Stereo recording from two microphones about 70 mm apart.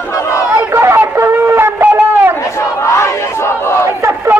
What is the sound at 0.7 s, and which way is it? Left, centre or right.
Chatter, right.